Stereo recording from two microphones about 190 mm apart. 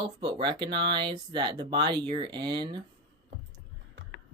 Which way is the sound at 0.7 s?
60° right (ahead or behind).